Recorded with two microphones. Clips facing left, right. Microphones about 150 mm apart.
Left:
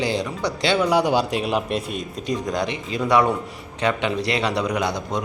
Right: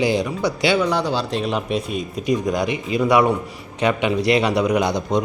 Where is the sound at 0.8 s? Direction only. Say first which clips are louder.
Left 2 dB; 10° left (ahead or behind).